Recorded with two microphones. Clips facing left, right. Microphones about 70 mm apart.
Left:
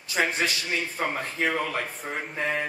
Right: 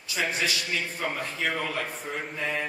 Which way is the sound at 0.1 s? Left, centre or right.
Left.